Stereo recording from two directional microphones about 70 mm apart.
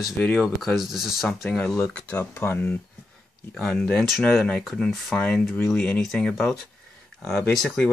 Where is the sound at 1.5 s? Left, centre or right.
Centre.